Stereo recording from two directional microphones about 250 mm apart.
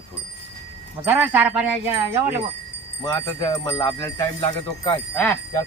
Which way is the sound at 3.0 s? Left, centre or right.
Centre.